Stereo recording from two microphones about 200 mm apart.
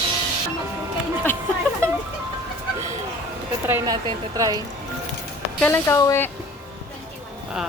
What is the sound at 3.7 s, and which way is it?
Speech, 10° right (ahead or behind).